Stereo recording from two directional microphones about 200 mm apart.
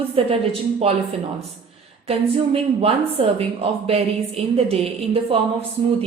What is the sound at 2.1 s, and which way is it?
A woman's voice, 30° right (ahead or behind).